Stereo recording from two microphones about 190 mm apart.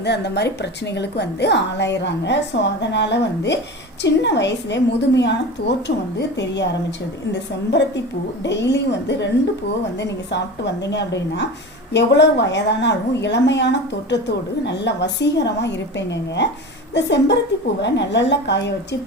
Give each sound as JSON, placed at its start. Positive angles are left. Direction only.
{"t": 0.0, "sound": "a woman's voice", "side_deg": 65}
{"t": 7.7, "sound": "a woman's voice", "side_deg": 65}
{"t": 10.8, "sound": "a woman's voice", "side_deg": 65}